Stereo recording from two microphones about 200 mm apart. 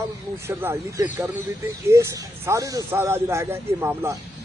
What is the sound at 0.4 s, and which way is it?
Speech, 10° right (ahead or behind).